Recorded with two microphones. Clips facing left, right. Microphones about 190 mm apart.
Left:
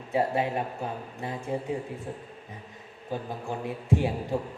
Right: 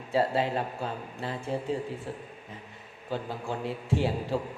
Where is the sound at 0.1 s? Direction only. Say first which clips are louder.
Even; 20° left (ahead or behind).